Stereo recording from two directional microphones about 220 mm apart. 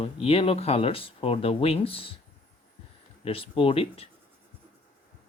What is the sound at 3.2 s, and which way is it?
Speech, 25° left (ahead or behind).